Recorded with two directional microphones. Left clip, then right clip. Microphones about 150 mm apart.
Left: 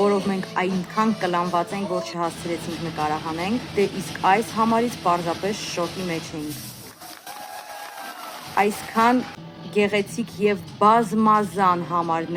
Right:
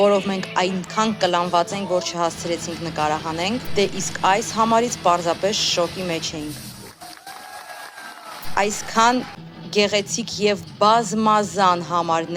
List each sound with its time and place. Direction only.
0.0 s speech: 25° right (ahead or behind)
3.0 s speech: 35° right (ahead or behind)
4.4 s speech: 25° right (ahead or behind)
5.5 s a woman's voice: 45° right (ahead or behind)
8.5 s speech: 25° right (ahead or behind)